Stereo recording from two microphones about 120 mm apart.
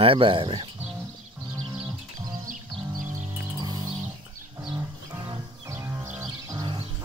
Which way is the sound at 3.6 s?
35° right (ahead or behind).